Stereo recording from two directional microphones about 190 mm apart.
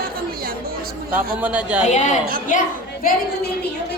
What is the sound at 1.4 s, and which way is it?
Speech, 5° right (ahead or behind).